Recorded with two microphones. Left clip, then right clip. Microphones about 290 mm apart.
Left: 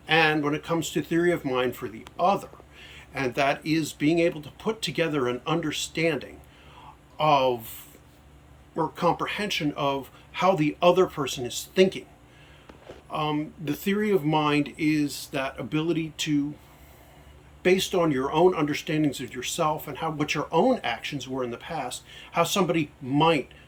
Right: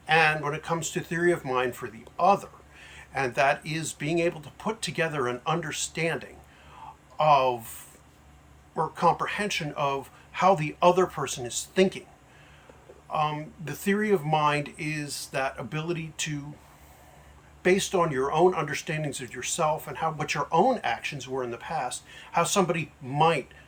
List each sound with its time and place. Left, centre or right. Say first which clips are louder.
0.0 s speech: left 1 dB; centre
8.7 s speech: right 1 dB; centre
13.1 s speech: even; centre
17.6 s speech: left 1 dB; centre